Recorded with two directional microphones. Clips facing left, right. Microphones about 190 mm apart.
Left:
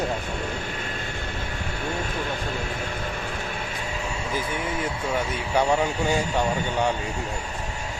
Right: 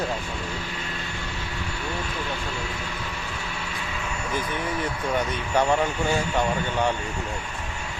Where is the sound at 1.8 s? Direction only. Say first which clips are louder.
Left 3 dB; 50° left (ahead or behind).